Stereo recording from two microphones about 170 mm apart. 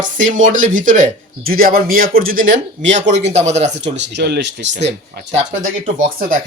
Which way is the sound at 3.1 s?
40° right (ahead or behind).